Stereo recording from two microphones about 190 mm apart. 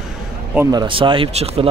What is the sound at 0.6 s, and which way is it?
Speech, 25° right (ahead or behind).